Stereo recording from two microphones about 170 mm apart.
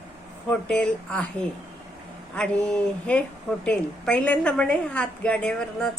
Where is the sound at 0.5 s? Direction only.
5° left (ahead or behind).